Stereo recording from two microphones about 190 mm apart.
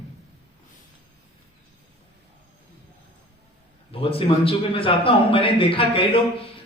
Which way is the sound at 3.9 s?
30° left (ahead or behind).